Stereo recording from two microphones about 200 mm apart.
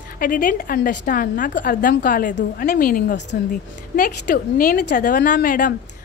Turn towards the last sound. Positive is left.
turn(degrees=45)  # may be behind; listen again after turning